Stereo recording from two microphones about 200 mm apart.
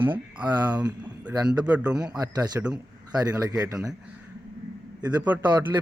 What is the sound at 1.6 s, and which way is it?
Speech, 5° right (ahead or behind).